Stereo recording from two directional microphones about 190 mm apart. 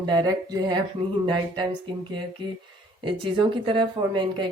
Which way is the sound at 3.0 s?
25° right (ahead or behind).